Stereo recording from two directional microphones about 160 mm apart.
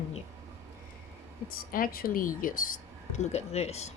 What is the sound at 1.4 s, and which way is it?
Speech, 65° left (ahead or behind).